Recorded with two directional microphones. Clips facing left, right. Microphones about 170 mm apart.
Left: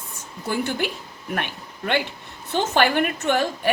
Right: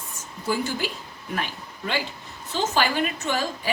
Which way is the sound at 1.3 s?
65° left (ahead or behind).